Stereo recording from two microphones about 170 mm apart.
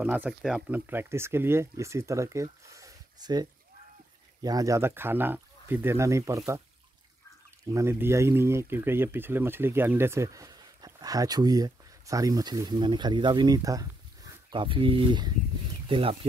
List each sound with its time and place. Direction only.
0.0 s speech: 10° right (ahead or behind)
7.6 s speech: 15° right (ahead or behind); by 16.2 s 35° right (ahead or behind)